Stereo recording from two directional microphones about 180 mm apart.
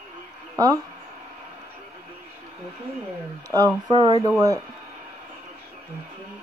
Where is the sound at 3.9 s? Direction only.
25° right (ahead or behind).